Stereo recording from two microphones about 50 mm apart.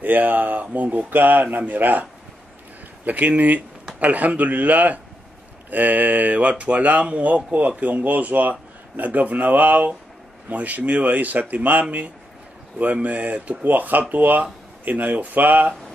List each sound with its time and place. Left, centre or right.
0.0 s speech: right
3.1 s speech: right